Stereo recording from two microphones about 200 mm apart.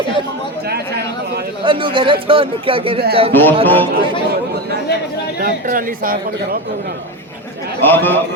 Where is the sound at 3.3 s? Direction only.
10° left (ahead or behind).